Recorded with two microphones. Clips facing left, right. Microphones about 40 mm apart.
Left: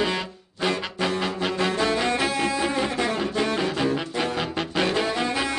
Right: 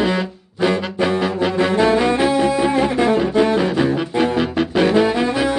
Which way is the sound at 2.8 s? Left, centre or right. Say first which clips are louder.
Right 8 dB; centre.